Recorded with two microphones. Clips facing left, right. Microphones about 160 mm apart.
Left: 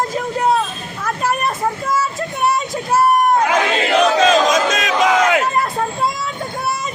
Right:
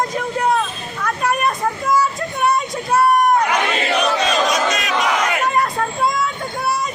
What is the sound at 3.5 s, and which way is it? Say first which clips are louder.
Battle cry: left 4 dB; 90° left.